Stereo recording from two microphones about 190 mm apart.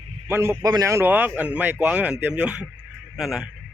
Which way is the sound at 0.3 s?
15° right (ahead or behind).